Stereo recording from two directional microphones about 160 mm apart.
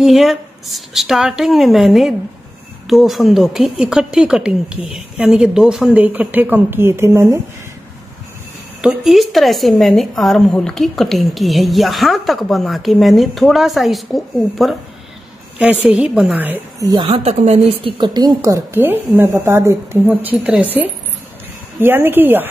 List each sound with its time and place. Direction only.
0.0 s a woman's voice: centre (ahead or behind); by 7.3 s 15° right (ahead or behind)
8.8 s a woman's voice: centre (ahead or behind)
16.8 s a woman's voice: 30° right (ahead or behind); by 22.5 s 10° right (ahead or behind)